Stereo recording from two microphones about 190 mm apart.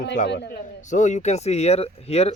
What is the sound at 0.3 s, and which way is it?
A man's voice, 60° left (ahead or behind).